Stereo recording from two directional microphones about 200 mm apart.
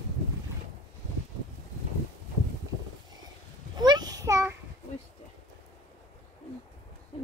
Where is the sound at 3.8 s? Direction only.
20° right (ahead or behind).